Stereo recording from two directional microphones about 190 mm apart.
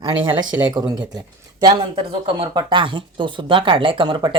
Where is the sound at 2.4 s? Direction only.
25° right (ahead or behind).